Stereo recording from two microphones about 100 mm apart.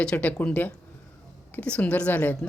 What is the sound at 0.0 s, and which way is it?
Speech, 10° left (ahead or behind).